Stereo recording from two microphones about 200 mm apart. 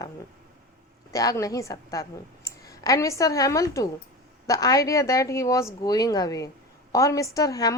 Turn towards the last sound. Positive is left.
turn(degrees=15)  # may be behind; listen again after turning